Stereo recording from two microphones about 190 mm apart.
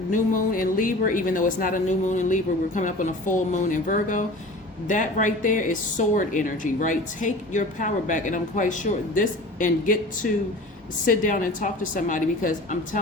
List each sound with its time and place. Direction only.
0.1 s speech: 45° left (ahead or behind)
11.0 s speech: 45° left (ahead or behind)